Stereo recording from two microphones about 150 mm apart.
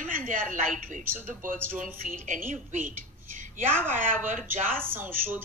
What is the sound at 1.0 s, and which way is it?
Speech, 15° right (ahead or behind).